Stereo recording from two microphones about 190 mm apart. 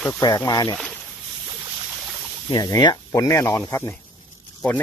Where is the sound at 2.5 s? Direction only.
20° left (ahead or behind).